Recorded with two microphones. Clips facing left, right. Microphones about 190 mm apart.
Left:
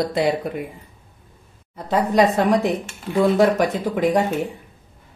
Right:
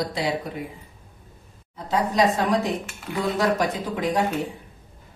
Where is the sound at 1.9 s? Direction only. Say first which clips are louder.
Left 4 dB; 60° left (ahead or behind).